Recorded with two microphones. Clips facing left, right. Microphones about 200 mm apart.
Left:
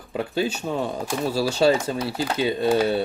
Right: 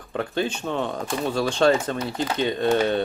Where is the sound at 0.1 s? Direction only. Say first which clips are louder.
Left 1 dB; 10° left (ahead or behind).